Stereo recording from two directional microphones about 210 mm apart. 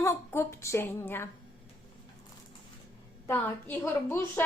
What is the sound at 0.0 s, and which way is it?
A woman's voice, 10° left (ahead or behind).